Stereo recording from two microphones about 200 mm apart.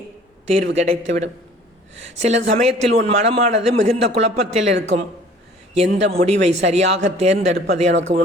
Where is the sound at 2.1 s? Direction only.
35° right (ahead or behind).